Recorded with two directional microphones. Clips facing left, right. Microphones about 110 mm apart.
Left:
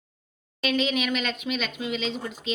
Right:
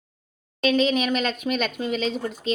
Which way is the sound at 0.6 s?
35° right (ahead or behind).